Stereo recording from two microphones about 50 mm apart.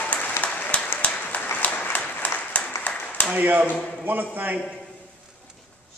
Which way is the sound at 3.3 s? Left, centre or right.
Right.